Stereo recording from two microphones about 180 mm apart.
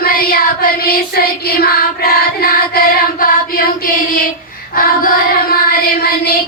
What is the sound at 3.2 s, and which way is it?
Child singing, 50° left (ahead or behind).